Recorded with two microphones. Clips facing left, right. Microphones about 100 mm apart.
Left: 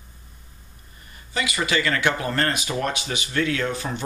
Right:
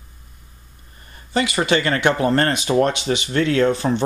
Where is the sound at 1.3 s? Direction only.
40° right (ahead or behind).